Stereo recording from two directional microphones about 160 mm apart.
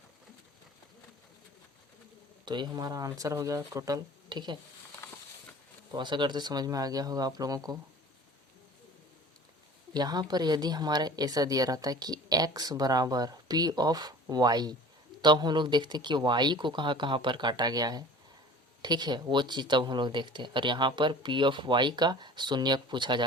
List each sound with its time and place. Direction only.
2.4 s speech: 25° right (ahead or behind)
5.9 s speech: 30° right (ahead or behind)
9.9 s speech: 25° right (ahead or behind)